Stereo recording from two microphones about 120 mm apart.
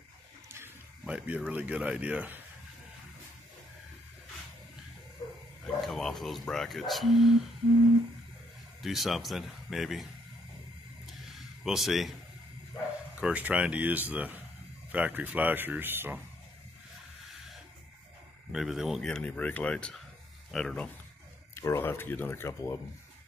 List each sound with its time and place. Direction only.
1.0 s a man's voice: 10° right (ahead or behind)
5.6 s speech: centre (ahead or behind)
8.8 s speech: centre (ahead or behind)
11.3 s speech: centre (ahead or behind)
13.2 s a man's voice: 10° right (ahead or behind)
18.5 s speech: 5° right (ahead or behind)
19.0 s speech: 10° left (ahead or behind)
21.5 s speech: 20° left (ahead or behind)